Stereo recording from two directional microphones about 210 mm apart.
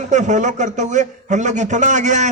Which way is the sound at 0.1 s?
35° right (ahead or behind).